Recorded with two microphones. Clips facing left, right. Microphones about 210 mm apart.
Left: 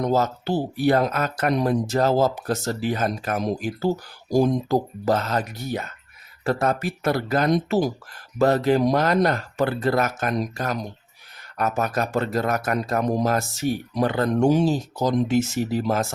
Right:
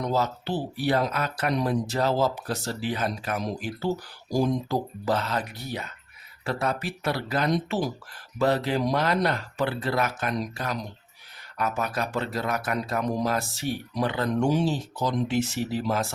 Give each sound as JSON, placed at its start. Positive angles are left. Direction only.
{"t": 0.0, "sound": "speech", "side_deg": 45}